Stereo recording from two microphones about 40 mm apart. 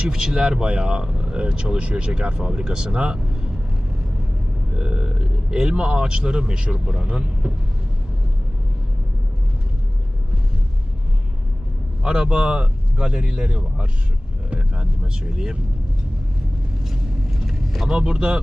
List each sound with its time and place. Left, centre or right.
0.1 s speech: centre
4.7 s speech: right
12.0 s speech: right
16.8 s vehicle: centre
17.8 s speech: right